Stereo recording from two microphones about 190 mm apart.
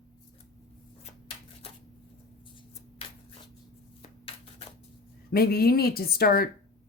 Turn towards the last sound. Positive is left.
turn(degrees=55)  # may be behind; listen again after turning